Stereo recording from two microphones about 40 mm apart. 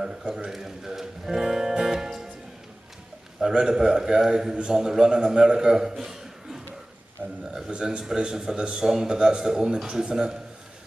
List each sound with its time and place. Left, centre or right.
0.0 s a man's voice: centre
3.3 s a man's voice: centre
7.7 s a man's voice: right